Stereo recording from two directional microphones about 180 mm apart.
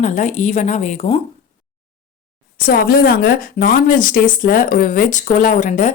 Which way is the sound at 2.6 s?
55° left (ahead or behind).